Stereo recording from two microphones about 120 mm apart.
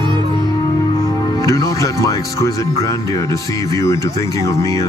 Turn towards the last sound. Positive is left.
turn(degrees=25)  # may be behind; listen again after turning